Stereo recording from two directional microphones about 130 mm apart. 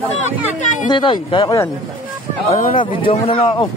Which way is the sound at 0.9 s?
40° left (ahead or behind).